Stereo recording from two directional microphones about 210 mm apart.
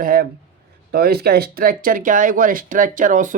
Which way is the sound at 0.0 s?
45° right (ahead or behind).